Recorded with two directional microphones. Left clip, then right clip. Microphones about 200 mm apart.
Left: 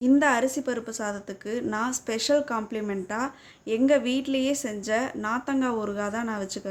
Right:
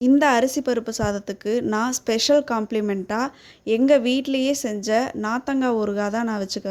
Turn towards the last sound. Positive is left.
turn(degrees=-35)  # may be behind; listen again after turning